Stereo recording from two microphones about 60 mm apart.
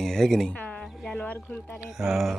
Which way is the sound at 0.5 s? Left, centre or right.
Left.